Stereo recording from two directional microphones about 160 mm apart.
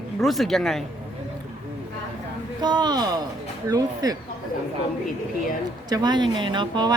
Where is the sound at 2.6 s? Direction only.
25° right (ahead or behind).